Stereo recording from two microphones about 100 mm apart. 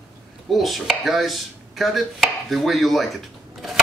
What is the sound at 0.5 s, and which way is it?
Chopping, centre (ahead or behind).